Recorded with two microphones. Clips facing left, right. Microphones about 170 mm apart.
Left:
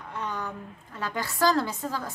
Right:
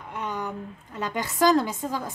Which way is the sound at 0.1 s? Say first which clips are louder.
Right 2 dB; 15° right (ahead or behind).